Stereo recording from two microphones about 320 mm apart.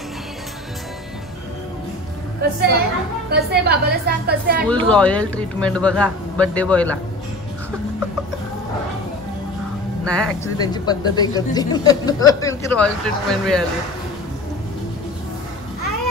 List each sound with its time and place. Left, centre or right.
3.3 s a woman's voice: right
4.6 s speech: centre
10.0 s speech: centre